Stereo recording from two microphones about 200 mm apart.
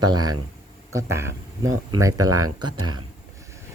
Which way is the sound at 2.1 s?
90° right.